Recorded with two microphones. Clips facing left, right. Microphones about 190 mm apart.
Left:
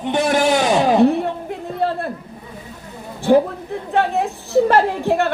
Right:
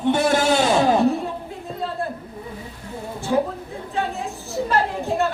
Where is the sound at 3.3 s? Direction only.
70° left (ahead or behind).